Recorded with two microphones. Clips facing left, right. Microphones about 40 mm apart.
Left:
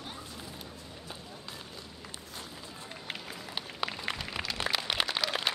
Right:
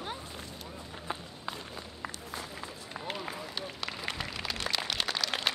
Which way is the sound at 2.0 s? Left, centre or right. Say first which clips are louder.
Right 7 dB; right.